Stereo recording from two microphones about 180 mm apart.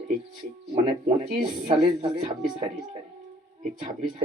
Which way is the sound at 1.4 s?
30° right (ahead or behind).